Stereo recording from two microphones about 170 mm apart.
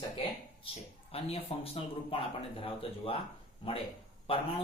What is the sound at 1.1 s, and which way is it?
Speech, 35° left (ahead or behind).